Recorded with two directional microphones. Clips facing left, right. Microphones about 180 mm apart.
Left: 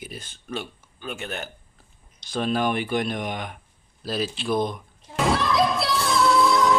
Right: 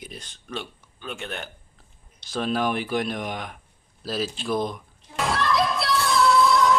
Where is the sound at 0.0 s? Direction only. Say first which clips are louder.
Left 2 dB; 5° left (ahead or behind).